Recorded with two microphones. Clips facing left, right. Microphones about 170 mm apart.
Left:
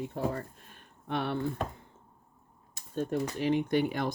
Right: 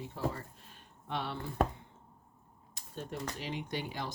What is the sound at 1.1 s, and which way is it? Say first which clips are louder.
Chopping: left 6 dB; 55° left (ahead or behind).